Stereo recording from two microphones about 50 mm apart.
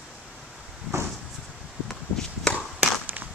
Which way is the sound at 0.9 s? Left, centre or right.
Right.